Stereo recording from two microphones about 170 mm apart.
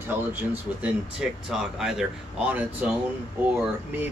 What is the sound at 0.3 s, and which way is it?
Speech, 10° right (ahead or behind).